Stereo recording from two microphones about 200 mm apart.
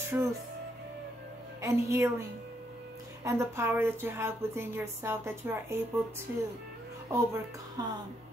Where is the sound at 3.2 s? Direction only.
15° right (ahead or behind).